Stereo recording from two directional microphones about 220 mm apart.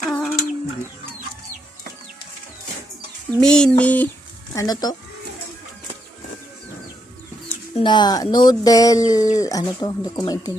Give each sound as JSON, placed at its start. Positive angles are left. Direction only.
{"t": 0.0, "sound": "child singing", "side_deg": 0}
{"t": 3.2, "sound": "a sound", "side_deg": 5}
{"t": 4.5, "sound": "speech", "side_deg": 15}
{"t": 7.8, "sound": "speech", "side_deg": 20}